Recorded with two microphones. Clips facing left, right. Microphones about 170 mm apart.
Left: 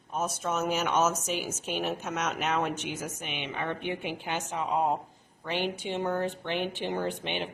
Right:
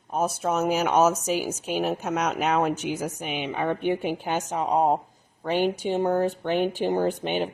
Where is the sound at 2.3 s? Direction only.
35° right (ahead or behind).